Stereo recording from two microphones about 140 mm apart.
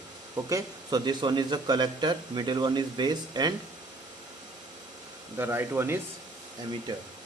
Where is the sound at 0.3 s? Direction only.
25° right (ahead or behind).